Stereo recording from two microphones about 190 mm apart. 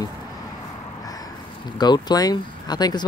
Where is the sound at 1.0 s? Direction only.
20° left (ahead or behind).